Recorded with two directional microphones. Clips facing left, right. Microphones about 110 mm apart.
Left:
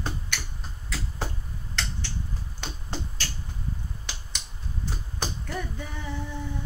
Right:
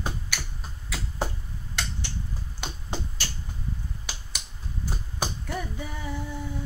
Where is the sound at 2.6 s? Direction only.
10° right (ahead or behind).